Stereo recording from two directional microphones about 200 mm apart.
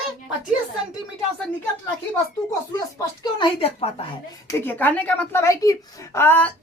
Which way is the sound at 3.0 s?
20° left (ahead or behind).